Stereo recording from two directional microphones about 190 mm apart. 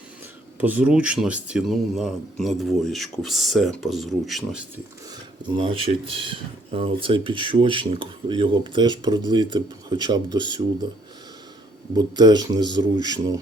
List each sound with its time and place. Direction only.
0.6 s speech: 10° right (ahead or behind)
5.5 s speech: 25° right (ahead or behind)
11.9 s speech: 20° right (ahead or behind)